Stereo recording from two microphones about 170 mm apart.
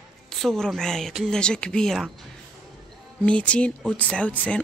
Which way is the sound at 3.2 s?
5° left (ahead or behind).